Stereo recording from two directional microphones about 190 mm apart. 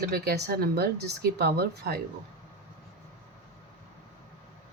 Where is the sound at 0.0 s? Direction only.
55° right (ahead or behind).